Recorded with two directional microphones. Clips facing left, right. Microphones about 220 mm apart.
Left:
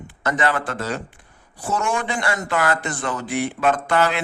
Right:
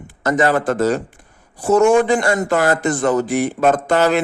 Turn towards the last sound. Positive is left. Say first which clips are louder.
# right 5 dB
turn(degrees=-40)  # may be behind; listen again after turning